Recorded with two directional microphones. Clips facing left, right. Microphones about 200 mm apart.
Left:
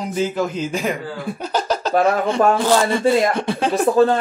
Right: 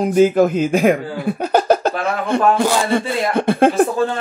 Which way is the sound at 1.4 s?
55° right (ahead or behind).